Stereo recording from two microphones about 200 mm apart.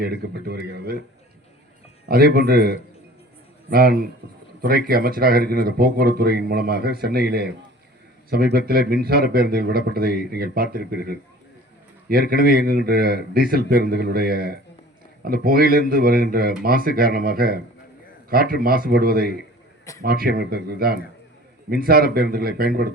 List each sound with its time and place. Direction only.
0.0 s speech: 55° right (ahead or behind)
2.0 s speech: 50° right (ahead or behind)
12.3 s speech: 50° right (ahead or behind)